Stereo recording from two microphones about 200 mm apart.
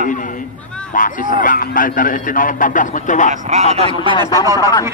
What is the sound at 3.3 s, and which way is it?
Speech, 35° right (ahead or behind).